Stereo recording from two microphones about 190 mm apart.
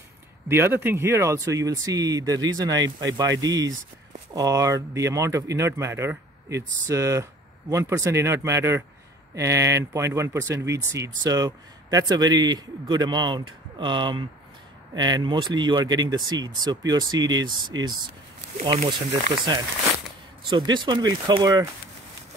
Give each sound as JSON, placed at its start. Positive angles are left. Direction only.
{"t": 0.5, "sound": "a man's voice", "side_deg": -15}
{"t": 18.6, "sound": "speech", "side_deg": -35}
{"t": 18.9, "sound": "a man's voice", "side_deg": -25}